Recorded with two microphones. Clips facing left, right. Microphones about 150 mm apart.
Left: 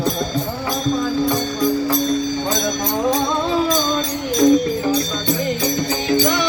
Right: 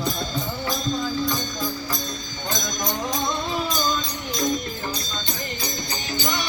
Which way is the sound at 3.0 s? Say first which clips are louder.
Left 10 dB; 80° left.